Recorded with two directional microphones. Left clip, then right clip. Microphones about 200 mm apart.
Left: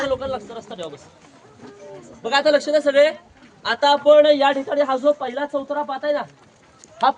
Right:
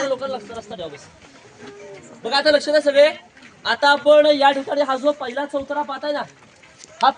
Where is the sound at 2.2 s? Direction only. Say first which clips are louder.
Even; 25° left (ahead or behind).